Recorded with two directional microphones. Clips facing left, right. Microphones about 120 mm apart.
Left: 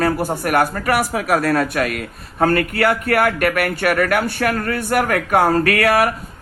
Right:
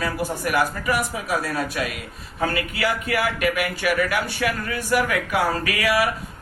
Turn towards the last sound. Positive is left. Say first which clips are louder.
# left 6 dB
turn(degrees=55)  # may be behind; listen again after turning